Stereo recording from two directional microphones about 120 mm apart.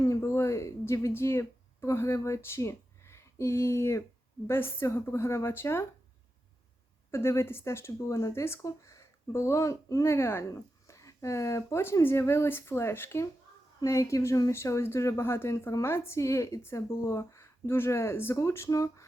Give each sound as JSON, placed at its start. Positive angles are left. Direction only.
{"t": 0.0, "sound": "a sound", "side_deg": 25}
{"t": 4.4, "sound": "speech", "side_deg": 20}
{"t": 7.1, "sound": "speech", "side_deg": 20}